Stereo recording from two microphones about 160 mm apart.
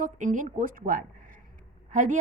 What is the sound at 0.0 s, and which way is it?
A woman's voice, 55° right (ahead or behind).